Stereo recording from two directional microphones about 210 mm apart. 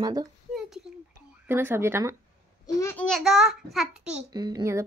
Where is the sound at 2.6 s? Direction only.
10° left (ahead or behind).